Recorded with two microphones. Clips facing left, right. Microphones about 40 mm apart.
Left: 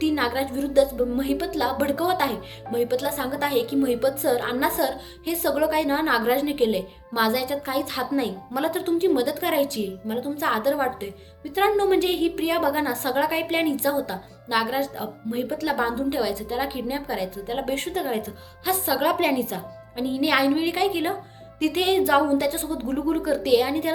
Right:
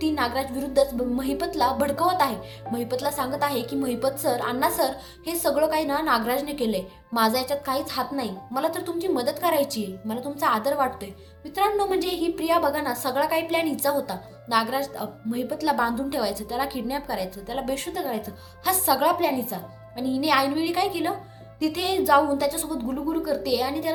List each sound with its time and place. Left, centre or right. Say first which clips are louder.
0.0 s speech: left 1 dB; left
18.6 s speech: right 1 dB; centre
19.1 s speech: left 2 dB; left
20.0 s a woman's voice: even; left
23.0 s a woman's voice: left 3 dB; left